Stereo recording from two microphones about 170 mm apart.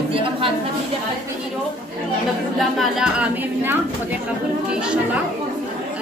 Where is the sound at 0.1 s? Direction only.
30° right (ahead or behind).